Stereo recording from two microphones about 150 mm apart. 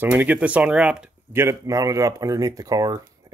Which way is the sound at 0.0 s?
10° right (ahead or behind).